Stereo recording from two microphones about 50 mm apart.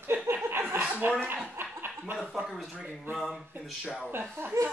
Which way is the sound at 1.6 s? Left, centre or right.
Right.